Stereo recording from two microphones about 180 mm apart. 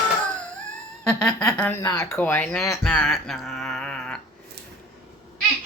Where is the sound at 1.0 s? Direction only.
5° left (ahead or behind).